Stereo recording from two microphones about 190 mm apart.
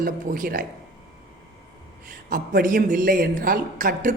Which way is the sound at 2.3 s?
45° right (ahead or behind).